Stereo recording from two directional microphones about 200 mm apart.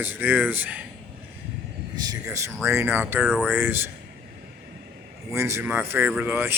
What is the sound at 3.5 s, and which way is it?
Speech, 10° right (ahead or behind).